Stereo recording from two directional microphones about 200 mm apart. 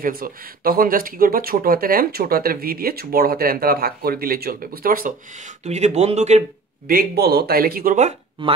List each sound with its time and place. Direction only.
0.0 s speech: 45° right (ahead or behind)
5.6 s speech: 35° right (ahead or behind)
6.9 s speech: 50° right (ahead or behind)
8.4 s speech: 25° right (ahead or behind)